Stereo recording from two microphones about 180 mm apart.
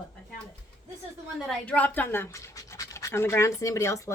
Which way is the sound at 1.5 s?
10° left (ahead or behind).